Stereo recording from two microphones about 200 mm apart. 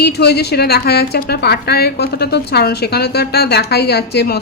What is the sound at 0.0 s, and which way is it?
A woman's voice, 55° left (ahead or behind).